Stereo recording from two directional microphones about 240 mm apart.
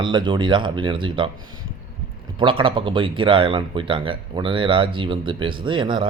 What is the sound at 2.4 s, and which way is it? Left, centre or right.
Speech, right.